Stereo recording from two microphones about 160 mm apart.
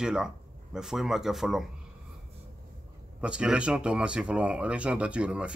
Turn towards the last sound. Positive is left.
turn(degrees=-5)  # may be behind; listen again after turning